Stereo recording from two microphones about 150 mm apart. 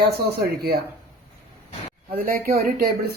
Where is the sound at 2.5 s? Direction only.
75° right (ahead or behind).